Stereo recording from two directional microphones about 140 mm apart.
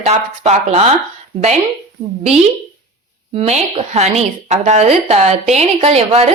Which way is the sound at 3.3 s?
50° right (ahead or behind).